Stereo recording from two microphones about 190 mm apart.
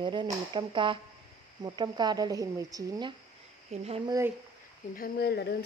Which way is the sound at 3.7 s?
30° right (ahead or behind).